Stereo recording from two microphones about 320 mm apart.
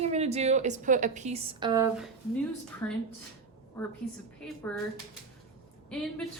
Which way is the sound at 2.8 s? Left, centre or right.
Centre.